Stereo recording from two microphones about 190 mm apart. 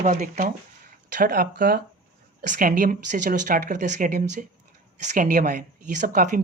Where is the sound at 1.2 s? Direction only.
55° right (ahead or behind).